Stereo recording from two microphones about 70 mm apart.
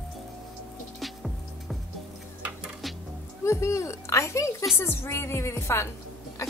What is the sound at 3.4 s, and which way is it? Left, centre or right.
A woman's voice, left.